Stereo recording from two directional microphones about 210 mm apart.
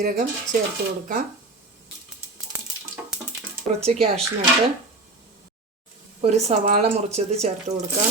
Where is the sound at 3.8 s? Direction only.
30° right (ahead or behind).